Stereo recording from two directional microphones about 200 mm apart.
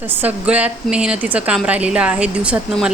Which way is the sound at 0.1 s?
10° right (ahead or behind).